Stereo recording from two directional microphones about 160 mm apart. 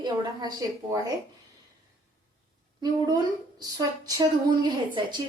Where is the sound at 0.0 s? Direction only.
25° right (ahead or behind).